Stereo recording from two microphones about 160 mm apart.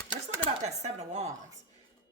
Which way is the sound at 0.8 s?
45° right (ahead or behind).